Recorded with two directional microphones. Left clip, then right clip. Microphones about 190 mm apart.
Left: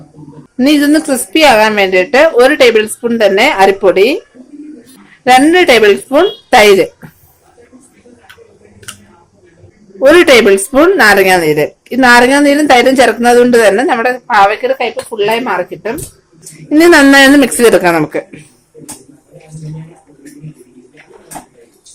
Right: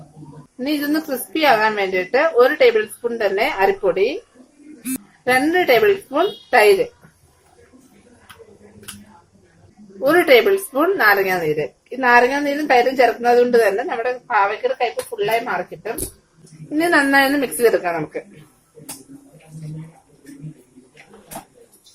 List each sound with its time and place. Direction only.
0.6 s a woman's voice: 45° left (ahead or behind)
5.2 s a woman's voice: 35° left (ahead or behind)
10.2 s a woman's voice: 40° left (ahead or behind)